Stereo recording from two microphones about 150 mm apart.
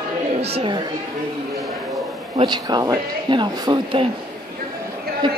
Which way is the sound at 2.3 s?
30° right (ahead or behind).